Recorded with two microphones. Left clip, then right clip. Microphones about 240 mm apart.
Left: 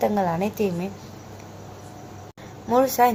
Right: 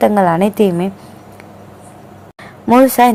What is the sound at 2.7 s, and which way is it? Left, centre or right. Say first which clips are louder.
Speech: right 9 dB; right.